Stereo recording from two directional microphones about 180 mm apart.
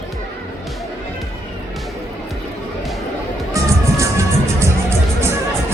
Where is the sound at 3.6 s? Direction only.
20° right (ahead or behind).